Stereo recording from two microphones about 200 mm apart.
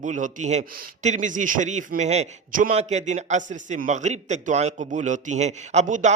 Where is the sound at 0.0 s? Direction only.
40° right (ahead or behind).